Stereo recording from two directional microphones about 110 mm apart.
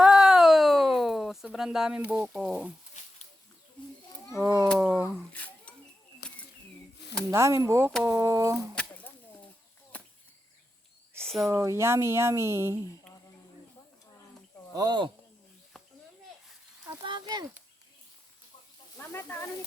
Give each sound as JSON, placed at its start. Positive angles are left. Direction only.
{"t": 0.0, "sound": "a sound", "side_deg": -5}
{"t": 1.5, "sound": "speech", "side_deg": -5}
{"t": 3.0, "sound": "a sound", "side_deg": 90}
{"t": 4.4, "sound": "speech", "side_deg": -30}
{"t": 4.8, "sound": "speech", "side_deg": -15}
{"t": 5.3, "sound": "rodents", "side_deg": 15}
{"t": 7.3, "sound": "speech", "side_deg": -25}
{"t": 8.7, "sound": "a sound", "side_deg": 10}
{"t": 11.2, "sound": "a sound", "side_deg": 5}
{"t": 11.4, "sound": "speech", "side_deg": -25}
{"t": 14.8, "sound": "speech", "side_deg": -45}
{"t": 17.0, "sound": "speech", "side_deg": -40}
{"t": 18.9, "sound": "speech", "side_deg": 20}